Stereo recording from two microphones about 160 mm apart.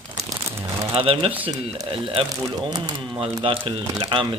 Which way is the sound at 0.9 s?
35° right (ahead or behind).